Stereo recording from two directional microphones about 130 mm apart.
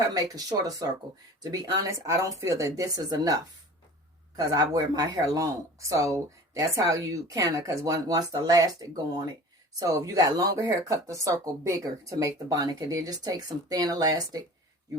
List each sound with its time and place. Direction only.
0.1 s speech: 30° right (ahead or behind)
4.4 s speech: 30° right (ahead or behind)
9.8 s speech: 25° right (ahead or behind)